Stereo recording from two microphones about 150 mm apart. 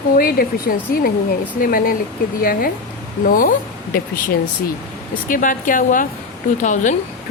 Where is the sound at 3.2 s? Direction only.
65° left (ahead or behind).